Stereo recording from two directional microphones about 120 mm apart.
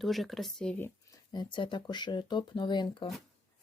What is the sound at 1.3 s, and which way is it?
Speech, 40° left (ahead or behind).